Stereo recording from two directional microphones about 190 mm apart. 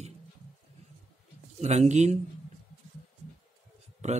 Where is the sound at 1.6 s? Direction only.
35° right (ahead or behind).